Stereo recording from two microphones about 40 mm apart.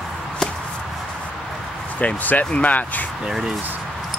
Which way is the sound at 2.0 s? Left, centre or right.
Left.